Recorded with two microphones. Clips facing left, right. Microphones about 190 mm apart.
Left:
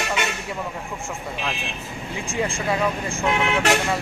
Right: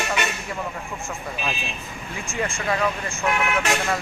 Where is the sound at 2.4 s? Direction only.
10° left (ahead or behind).